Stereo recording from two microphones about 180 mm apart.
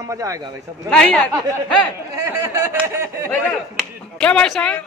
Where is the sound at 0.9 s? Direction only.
5° left (ahead or behind).